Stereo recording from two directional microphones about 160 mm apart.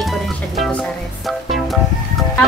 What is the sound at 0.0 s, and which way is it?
Music, centre (ahead or behind).